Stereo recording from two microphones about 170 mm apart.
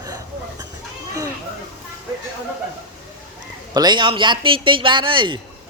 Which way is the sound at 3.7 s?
25° right (ahead or behind).